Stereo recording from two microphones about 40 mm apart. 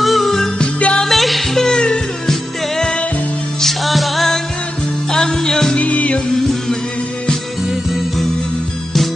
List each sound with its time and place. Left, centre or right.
0.0 s music: centre
0.6 s music: left
1.0 s music: centre
1.7 s music: left
3.6 s music: centre
5.1 s music: centre
5.8 s music: left